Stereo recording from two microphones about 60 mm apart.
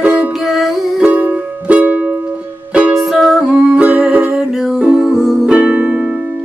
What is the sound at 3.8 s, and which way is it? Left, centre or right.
Music, right.